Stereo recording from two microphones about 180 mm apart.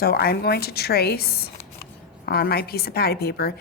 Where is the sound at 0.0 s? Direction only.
60° left (ahead or behind).